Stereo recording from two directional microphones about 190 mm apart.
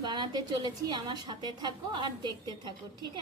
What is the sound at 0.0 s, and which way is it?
A woman's voice, 25° right (ahead or behind).